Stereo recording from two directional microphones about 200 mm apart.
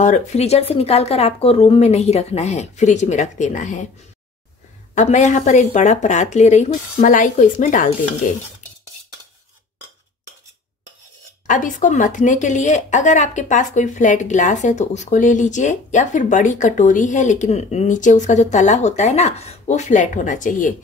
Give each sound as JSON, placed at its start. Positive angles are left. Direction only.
{"t": 0.0, "sound": "a woman's voice", "side_deg": 35}
{"t": 4.9, "sound": "a woman's voice", "side_deg": 35}
{"t": 11.4, "sound": "a woman's voice", "side_deg": 40}